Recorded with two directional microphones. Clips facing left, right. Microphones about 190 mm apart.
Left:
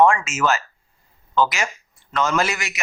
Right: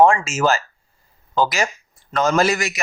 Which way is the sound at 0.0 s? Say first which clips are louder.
Right 2 dB; 30° right (ahead or behind).